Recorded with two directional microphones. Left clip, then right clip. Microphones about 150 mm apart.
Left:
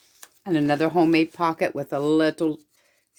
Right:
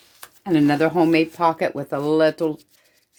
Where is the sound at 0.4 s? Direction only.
40° left (ahead or behind).